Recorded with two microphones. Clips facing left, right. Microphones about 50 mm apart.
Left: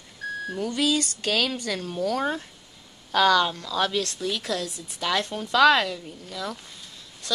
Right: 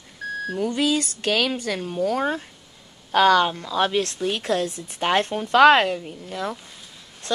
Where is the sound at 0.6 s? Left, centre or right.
Right.